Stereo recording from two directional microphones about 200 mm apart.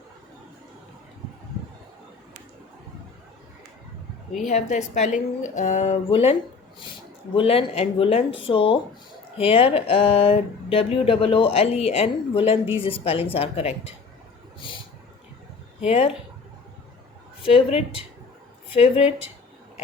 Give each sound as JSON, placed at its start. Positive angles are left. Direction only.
{"t": 4.4, "sound": "speech", "side_deg": 35}
{"t": 7.3, "sound": "speech", "side_deg": 30}
{"t": 15.8, "sound": "speech", "side_deg": 30}
{"t": 17.4, "sound": "speech", "side_deg": 30}